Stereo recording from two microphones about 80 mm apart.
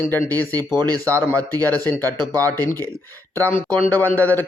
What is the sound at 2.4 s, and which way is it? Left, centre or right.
Speech, left.